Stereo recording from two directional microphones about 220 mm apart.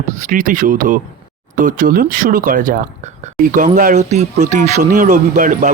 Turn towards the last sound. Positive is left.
turn(degrees=-35)  # may be behind; listen again after turning